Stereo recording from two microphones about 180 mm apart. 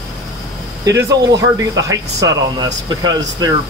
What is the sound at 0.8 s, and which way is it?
Speech, 15° right (ahead or behind).